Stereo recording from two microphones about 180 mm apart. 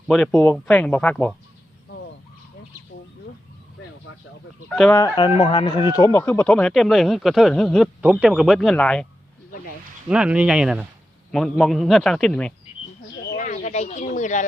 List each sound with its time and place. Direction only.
0.1 s speech: centre (ahead or behind)
4.7 s speech: 5° left (ahead or behind)
4.9 s speech: 20° left (ahead or behind); by 9.0 s 5° left (ahead or behind)
10.1 s speech: 5° right (ahead or behind)
13.3 s speech: 45° left (ahead or behind)